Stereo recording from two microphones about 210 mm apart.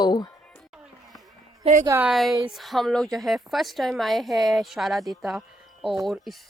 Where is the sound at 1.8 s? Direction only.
15° right (ahead or behind).